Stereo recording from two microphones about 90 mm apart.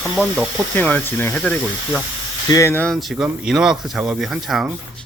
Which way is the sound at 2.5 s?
35° left (ahead or behind).